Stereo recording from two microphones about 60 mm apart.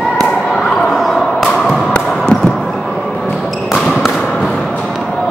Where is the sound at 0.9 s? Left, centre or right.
Centre.